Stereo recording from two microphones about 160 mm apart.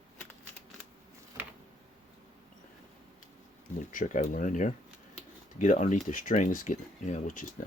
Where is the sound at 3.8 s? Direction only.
55° left (ahead or behind).